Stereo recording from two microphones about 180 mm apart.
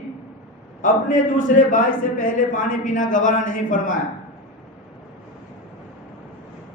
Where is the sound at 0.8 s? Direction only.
45° left (ahead or behind).